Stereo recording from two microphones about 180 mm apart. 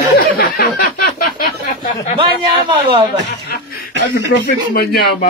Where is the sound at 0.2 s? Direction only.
55° left (ahead or behind).